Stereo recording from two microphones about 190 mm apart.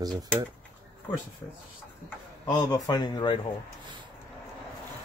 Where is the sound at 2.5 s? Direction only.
20° left (ahead or behind).